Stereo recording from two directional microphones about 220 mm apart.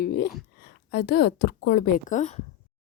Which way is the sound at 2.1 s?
30° left (ahead or behind).